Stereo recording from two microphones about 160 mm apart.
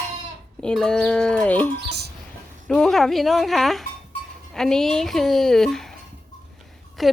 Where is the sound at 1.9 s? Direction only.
90° right.